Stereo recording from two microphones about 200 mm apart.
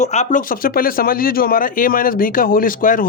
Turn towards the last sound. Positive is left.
turn(degrees=40)  # may be behind; listen again after turning